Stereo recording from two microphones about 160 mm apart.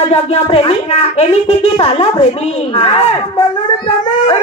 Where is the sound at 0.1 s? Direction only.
40° left (ahead or behind).